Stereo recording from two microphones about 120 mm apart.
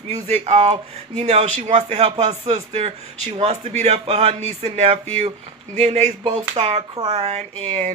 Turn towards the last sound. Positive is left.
turn(degrees=-60)  # may be behind; listen again after turning